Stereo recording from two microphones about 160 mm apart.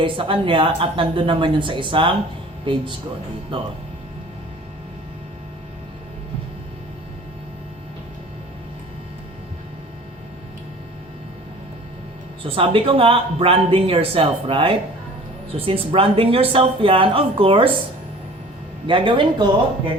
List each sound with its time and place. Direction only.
0.0 s speech: 30° right (ahead or behind)
12.4 s speech: 35° right (ahead or behind)
18.9 s speech: 30° right (ahead or behind)